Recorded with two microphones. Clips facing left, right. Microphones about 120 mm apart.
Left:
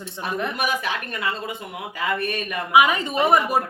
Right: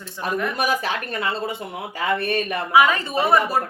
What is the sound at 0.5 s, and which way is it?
Speech, 35° right (ahead or behind).